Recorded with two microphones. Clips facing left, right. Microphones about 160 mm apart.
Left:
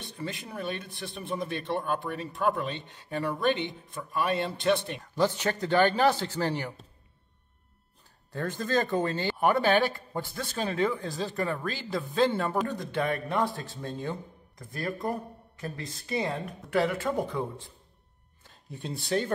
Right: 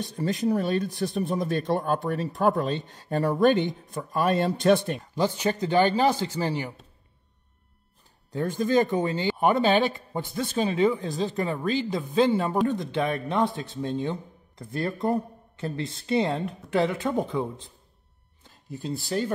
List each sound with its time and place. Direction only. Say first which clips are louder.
0.0 s speech: right 11 dB; 40° right (ahead or behind)
5.1 s speech: right 1 dB; 15° right (ahead or behind)
8.3 s speech: right 5 dB; 15° right (ahead or behind)
18.5 s speech: right 5 dB; centre (ahead or behind)